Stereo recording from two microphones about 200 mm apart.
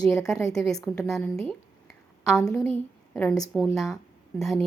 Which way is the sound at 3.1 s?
10° left (ahead or behind).